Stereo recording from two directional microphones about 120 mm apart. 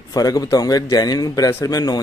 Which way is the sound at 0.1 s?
30° left (ahead or behind).